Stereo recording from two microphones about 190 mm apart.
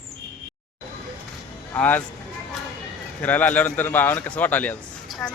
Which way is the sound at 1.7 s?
10° left (ahead or behind).